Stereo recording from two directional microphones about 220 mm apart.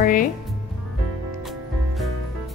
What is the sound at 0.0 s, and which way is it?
Speech, 40° left (ahead or behind).